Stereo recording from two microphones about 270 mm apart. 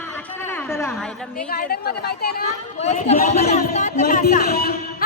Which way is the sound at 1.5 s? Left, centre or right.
Left.